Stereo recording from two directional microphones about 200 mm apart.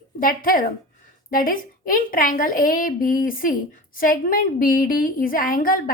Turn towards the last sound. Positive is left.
turn(degrees=45)  # may be behind; listen again after turning